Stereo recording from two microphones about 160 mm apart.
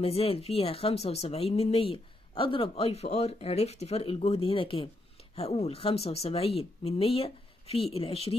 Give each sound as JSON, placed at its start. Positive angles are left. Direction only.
{"t": 0.0, "sound": "speech", "side_deg": 40}